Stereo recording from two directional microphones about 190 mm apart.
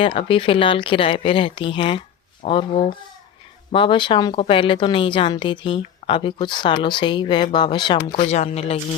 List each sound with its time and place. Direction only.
0.0 s a woman's voice: 25° left (ahead or behind)